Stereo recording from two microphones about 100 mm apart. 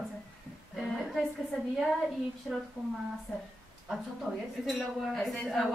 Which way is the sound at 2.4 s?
Centre (ahead or behind).